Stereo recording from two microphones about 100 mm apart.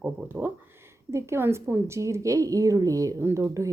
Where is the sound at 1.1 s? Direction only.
25° right (ahead or behind).